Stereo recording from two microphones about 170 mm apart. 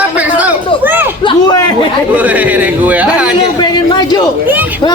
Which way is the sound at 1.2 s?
30° left (ahead or behind).